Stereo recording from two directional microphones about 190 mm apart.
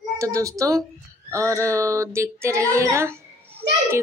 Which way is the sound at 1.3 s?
15° right (ahead or behind).